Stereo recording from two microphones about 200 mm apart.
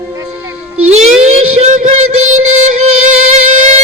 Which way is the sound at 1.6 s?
35° right (ahead or behind).